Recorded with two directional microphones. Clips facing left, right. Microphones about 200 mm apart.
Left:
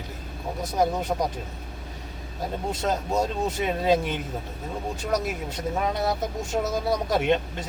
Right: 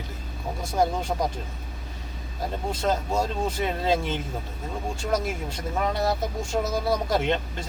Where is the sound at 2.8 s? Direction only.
20° left (ahead or behind).